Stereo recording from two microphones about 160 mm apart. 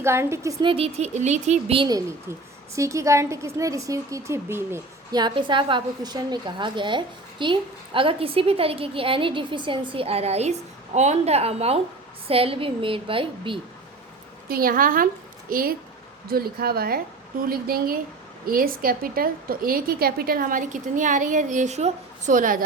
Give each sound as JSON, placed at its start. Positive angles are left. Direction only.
{"t": 0.0, "sound": "a woman's voice", "side_deg": -15}
{"t": 0.6, "sound": "a woman's voice", "side_deg": -35}
{"t": 5.1, "sound": "a woman's voice", "side_deg": -30}
{"t": 14.4, "sound": "a woman's voice", "side_deg": -65}